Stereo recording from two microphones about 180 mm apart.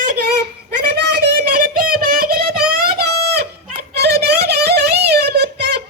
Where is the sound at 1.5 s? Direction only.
55° right (ahead or behind).